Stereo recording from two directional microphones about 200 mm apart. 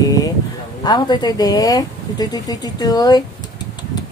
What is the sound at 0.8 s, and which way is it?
Speech, 20° left (ahead or behind).